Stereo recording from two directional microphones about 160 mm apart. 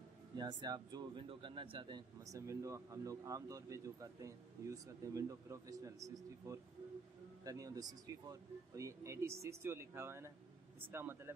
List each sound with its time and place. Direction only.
0.4 s speech: 25° right (ahead or behind)